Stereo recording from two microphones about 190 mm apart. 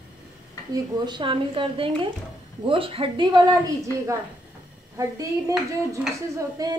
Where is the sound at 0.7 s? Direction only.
25° right (ahead or behind).